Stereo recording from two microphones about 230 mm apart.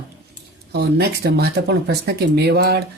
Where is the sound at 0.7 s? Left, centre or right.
Right.